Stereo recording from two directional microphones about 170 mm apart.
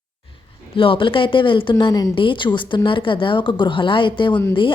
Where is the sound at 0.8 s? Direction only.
30° left (ahead or behind).